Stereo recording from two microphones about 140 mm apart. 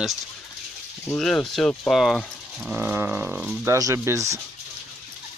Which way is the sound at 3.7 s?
20° right (ahead or behind).